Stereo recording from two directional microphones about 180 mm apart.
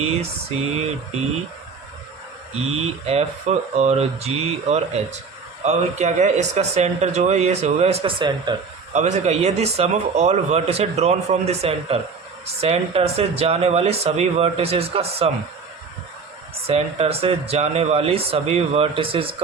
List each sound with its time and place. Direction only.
2.6 s speech: 35° right (ahead or behind)
8.9 s speech: 40° right (ahead or behind)
16.6 s speech: 35° right (ahead or behind)